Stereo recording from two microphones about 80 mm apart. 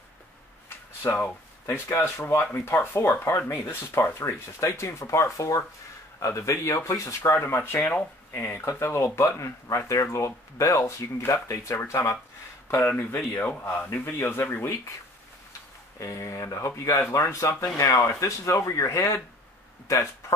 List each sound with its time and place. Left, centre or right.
0.7 s speech: left
13.4 s speech: left
16.0 s speech: left